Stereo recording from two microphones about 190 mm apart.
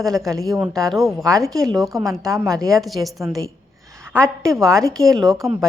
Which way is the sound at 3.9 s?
15° right (ahead or behind).